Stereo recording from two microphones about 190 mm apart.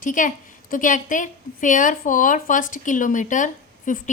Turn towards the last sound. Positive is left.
turn(degrees=40)  # may be behind; listen again after turning